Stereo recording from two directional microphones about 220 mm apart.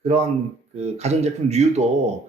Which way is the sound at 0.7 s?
30° right (ahead or behind).